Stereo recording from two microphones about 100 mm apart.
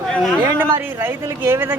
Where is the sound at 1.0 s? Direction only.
20° right (ahead or behind).